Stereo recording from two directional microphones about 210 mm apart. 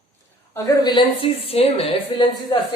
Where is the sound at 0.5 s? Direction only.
20° left (ahead or behind).